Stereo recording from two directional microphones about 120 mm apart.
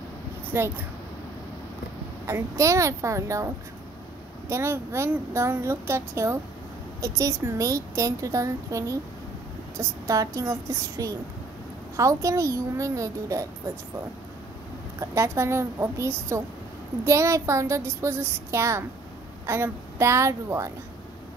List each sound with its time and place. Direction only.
0.5 s a woman's voice: 20° right (ahead or behind)
2.2 s a woman's voice: 20° right (ahead or behind)
15.0 s a woman's voice: 25° right (ahead or behind)